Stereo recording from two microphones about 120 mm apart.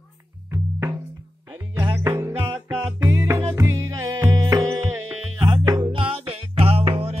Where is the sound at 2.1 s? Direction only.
25° right (ahead or behind); by 7.2 s 50° right (ahead or behind).